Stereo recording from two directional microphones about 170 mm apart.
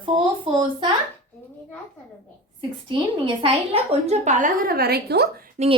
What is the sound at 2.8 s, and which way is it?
A woman's voice, 30° right (ahead or behind).